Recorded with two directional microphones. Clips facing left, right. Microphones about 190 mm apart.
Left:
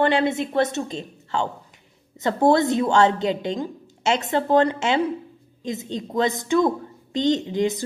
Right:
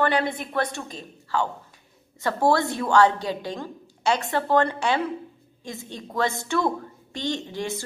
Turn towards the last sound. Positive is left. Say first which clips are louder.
# left 7 dB
turn(degrees=20)  # may be behind; listen again after turning